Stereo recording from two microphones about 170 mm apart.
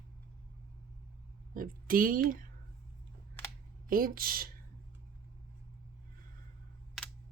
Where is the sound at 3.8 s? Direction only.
55° right (ahead or behind).